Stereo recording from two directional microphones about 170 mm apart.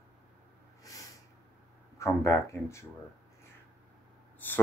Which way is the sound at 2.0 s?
15° left (ahead or behind).